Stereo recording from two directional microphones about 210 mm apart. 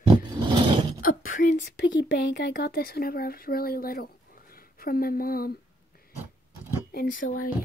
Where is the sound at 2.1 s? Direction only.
50° left (ahead or behind).